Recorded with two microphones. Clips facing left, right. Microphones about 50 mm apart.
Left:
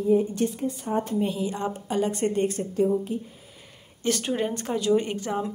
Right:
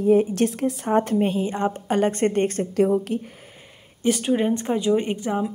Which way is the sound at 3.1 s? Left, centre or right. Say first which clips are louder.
Right 4 dB; right.